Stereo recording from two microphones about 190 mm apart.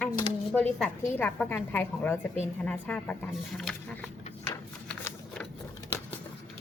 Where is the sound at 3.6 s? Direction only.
Centre (ahead or behind).